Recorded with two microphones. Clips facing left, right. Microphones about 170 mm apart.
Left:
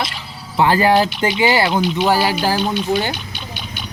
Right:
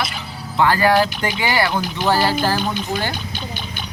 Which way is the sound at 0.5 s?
20° left (ahead or behind).